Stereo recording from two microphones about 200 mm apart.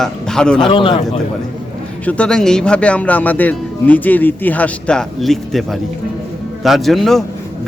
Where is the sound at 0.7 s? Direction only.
25° left (ahead or behind).